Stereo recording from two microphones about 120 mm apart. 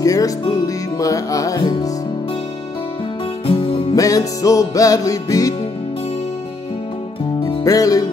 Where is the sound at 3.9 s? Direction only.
30° left (ahead or behind).